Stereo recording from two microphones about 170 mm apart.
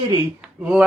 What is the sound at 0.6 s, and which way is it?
Speech, 5° right (ahead or behind).